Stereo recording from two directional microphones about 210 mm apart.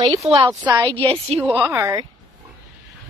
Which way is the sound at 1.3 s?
5° right (ahead or behind).